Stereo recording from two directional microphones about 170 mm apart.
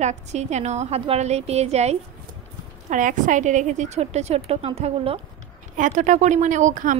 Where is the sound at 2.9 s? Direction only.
50° right (ahead or behind).